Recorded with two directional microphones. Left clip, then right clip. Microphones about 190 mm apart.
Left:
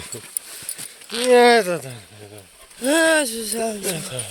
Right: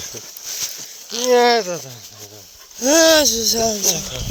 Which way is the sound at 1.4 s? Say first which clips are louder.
Left 2 dB; 15° left (ahead or behind).